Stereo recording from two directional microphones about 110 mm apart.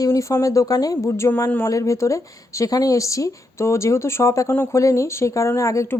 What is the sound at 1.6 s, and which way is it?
Speech, 30° left (ahead or behind).